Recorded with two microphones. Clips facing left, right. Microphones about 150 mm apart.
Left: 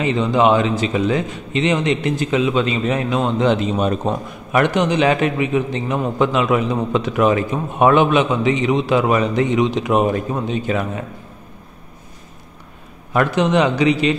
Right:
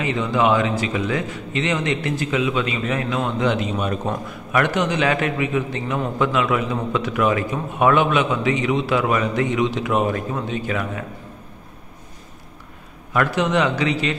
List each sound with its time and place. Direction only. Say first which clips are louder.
0.0 s a man's voice: left 4 dB; 25° left (ahead or behind)
13.1 s a man's voice: left 3 dB; 25° left (ahead or behind)